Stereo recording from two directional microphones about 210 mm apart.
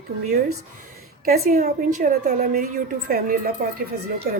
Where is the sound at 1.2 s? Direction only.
45° right (ahead or behind).